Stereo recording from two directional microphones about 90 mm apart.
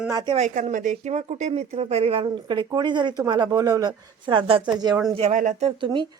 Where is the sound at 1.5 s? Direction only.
90° right.